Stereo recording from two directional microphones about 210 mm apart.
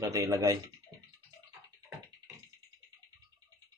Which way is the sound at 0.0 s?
15° right (ahead or behind).